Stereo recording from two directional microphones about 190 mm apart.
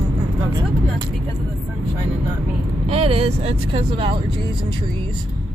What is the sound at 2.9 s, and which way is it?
Speech, 30° right (ahead or behind).